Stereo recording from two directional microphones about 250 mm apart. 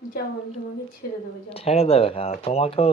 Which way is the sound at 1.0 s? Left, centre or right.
Left.